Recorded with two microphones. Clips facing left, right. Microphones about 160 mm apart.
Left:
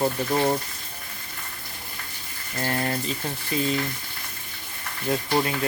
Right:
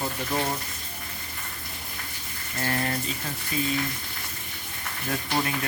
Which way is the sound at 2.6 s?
30° left (ahead or behind).